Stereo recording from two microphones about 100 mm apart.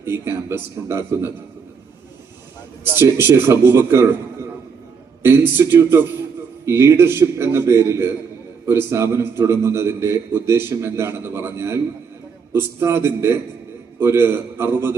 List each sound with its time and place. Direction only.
0.0 s a man's voice: 25° right (ahead or behind)
2.8 s a man's voice: 20° right (ahead or behind)
5.2 s a man's voice: 20° right (ahead or behind)